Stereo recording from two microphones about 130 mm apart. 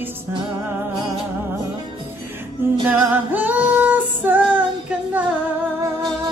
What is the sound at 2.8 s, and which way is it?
Music, 15° right (ahead or behind).